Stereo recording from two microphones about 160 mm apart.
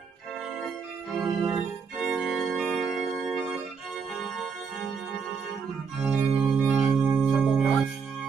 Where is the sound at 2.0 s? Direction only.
5° right (ahead or behind).